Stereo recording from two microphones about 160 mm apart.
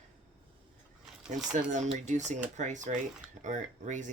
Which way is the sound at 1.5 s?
50° right (ahead or behind).